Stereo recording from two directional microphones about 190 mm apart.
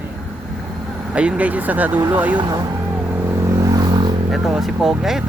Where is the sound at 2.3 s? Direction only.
20° right (ahead or behind).